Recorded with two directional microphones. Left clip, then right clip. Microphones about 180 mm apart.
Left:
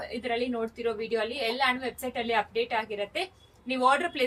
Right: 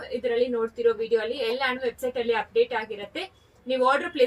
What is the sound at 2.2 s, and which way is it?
Speech, 25° left (ahead or behind).